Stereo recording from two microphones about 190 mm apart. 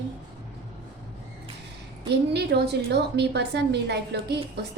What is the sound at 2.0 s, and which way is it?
A woman's voice, 60° right (ahead or behind).